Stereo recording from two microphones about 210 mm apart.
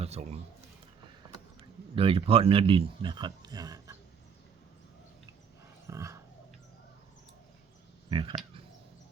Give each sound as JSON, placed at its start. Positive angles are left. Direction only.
{"t": 0.0, "sound": "a man's voice", "side_deg": -30}
{"t": 2.0, "sound": "a man's voice", "side_deg": -25}
{"t": 5.9, "sound": "a sound", "side_deg": -15}
{"t": 8.1, "sound": "a man's voice", "side_deg": -25}